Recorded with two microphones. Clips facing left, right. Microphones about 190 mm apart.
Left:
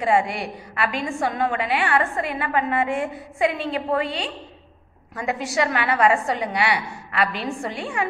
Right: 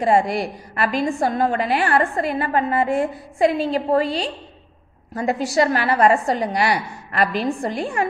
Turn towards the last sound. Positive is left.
turn(degrees=-40)  # may be behind; listen again after turning